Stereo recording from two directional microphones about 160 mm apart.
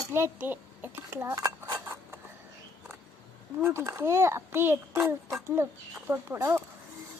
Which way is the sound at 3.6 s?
15° right (ahead or behind).